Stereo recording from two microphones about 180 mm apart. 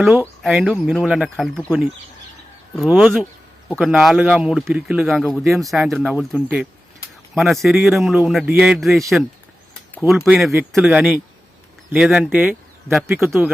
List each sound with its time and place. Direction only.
0.0 s a man's voice: 5° right (ahead or behind)
2.9 s a man's voice: 5° right (ahead or behind)
10.2 s a man's voice: 5° right (ahead or behind)